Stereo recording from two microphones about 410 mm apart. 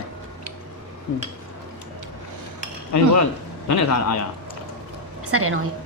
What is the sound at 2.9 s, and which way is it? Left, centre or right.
Speech, left.